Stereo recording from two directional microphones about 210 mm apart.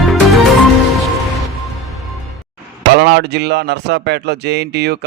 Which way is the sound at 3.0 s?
55° right (ahead or behind).